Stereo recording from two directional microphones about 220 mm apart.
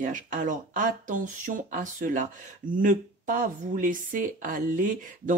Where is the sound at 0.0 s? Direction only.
35° right (ahead or behind).